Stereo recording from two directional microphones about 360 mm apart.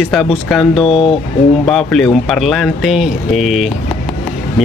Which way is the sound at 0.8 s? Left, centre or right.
Centre.